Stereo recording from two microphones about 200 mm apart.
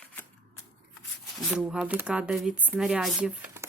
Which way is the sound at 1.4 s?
Centre (ahead or behind).